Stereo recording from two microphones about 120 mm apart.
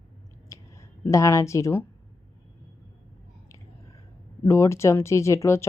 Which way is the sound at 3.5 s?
25° left (ahead or behind).